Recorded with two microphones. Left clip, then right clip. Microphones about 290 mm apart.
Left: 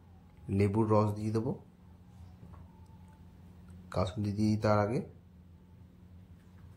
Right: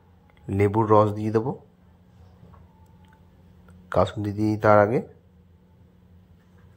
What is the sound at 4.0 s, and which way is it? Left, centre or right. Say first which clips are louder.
Speech: right 12 dB; right.